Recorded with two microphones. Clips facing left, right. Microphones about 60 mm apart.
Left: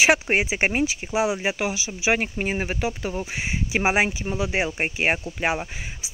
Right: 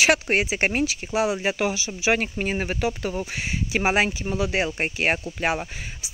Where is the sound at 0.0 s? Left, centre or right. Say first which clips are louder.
Left 1 dB; centre.